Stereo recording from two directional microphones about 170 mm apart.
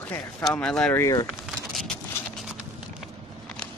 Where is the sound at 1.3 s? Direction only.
Centre (ahead or behind).